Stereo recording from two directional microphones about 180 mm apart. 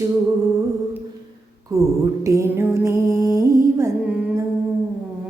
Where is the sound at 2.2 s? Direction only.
15° right (ahead or behind).